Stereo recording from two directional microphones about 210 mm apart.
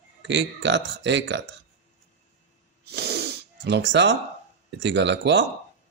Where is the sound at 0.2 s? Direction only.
55° right (ahead or behind).